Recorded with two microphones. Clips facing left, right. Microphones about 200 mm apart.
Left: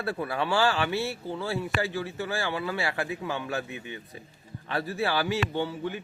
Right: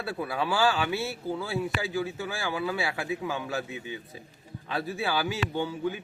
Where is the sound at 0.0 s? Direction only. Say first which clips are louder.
Left 1 dB; centre (ahead or behind).